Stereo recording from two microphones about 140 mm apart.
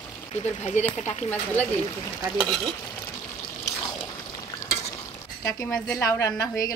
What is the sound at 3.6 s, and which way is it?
Trickle, 25° left (ahead or behind).